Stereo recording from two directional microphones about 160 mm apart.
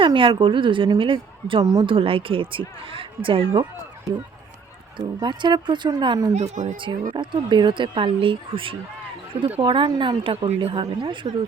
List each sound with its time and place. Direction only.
0.0 s a woman's voice: 30° right (ahead or behind)
4.9 s speech: 30° right (ahead or behind)
6.3 s speech: 45° right (ahead or behind)
7.1 s a woman's voice: 30° right (ahead or behind)